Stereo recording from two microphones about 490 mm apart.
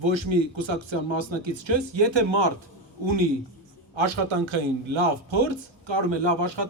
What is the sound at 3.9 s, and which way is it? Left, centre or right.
A man's voice, right.